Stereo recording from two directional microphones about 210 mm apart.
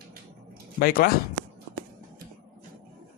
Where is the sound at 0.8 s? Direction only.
45° left (ahead or behind).